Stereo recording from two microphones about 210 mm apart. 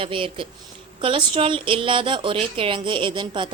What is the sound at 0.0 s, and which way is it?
A woman's voice, 25° right (ahead or behind).